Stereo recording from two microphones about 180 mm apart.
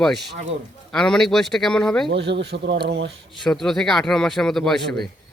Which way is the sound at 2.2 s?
70° right (ahead or behind).